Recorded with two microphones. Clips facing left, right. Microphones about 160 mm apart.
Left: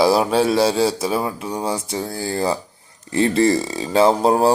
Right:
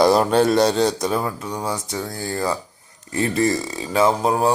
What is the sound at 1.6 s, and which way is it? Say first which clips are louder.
Speech: left 3 dB; 25° left (ahead or behind).